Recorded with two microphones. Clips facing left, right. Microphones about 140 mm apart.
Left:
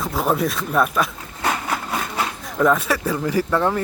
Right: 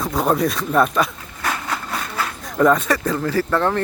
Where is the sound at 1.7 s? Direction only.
20° left (ahead or behind).